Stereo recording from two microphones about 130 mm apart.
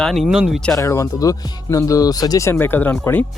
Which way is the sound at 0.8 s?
25° left (ahead or behind).